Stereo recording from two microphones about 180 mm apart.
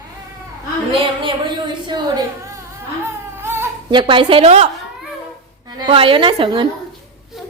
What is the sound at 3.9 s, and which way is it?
Speech, 25° right (ahead or behind).